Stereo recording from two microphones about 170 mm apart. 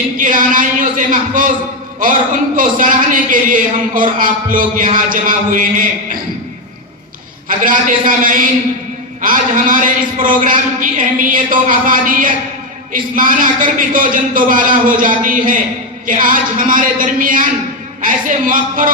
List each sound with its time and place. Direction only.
0.2 s a man's voice: 50° right (ahead or behind)
2.6 s a man's voice: 50° right (ahead or behind)
7.4 s a man's voice: 50° right (ahead or behind)